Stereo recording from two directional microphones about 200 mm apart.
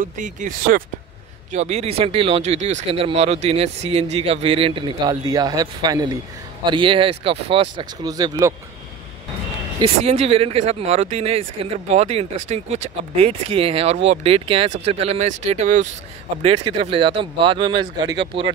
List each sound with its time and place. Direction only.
0.0 s speech: 40° right (ahead or behind); by 8.5 s 15° right (ahead or behind)
9.8 s speech: 30° right (ahead or behind)